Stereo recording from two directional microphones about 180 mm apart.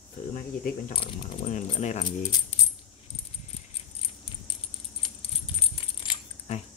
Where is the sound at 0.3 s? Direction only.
50° left (ahead or behind).